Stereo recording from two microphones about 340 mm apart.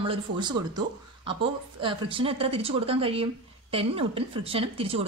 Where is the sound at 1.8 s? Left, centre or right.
Centre.